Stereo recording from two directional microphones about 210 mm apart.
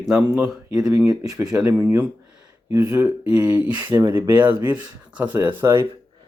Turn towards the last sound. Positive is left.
turn(degrees=-10)  # may be behind; listen again after turning